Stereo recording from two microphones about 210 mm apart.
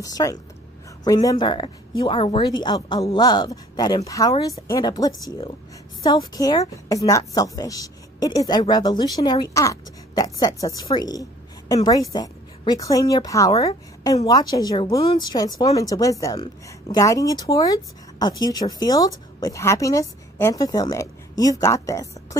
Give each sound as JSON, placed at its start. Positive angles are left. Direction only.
{"t": 0.0, "sound": "a woman's voice", "side_deg": 15}